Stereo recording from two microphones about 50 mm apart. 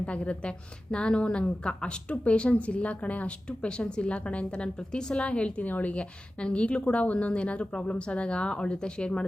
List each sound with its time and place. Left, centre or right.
0.0 s a woman's voice: left